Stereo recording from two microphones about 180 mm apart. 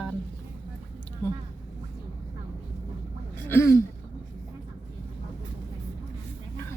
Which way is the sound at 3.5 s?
15° left (ahead or behind).